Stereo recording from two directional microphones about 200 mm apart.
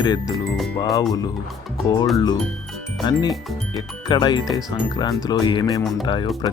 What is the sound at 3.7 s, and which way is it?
Speech, 20° left (ahead or behind).